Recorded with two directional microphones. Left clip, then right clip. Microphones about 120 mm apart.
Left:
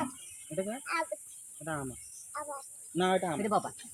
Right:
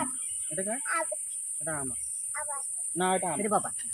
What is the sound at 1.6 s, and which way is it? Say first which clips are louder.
Cricket: right 1 dB; centre (ahead or behind).